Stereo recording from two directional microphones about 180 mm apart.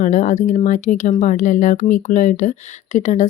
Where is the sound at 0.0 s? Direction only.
45° left (ahead or behind).